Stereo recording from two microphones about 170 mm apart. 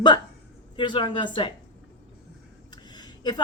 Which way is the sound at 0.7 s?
30° left (ahead or behind).